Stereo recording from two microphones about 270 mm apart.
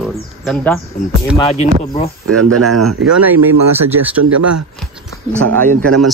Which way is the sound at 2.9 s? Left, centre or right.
Right.